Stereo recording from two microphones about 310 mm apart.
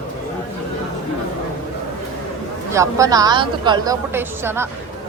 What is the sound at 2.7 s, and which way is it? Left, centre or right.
A woman's voice, centre.